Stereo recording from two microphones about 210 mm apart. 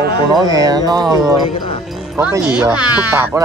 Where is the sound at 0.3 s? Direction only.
15° right (ahead or behind).